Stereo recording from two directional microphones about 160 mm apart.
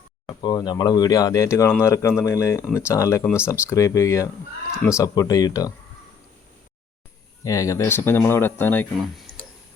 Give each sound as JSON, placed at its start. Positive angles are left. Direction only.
{"t": 0.3, "sound": "speech", "side_deg": 25}
{"t": 7.4, "sound": "speech", "side_deg": 20}